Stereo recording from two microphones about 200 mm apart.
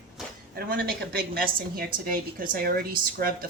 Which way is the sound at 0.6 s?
50° right (ahead or behind).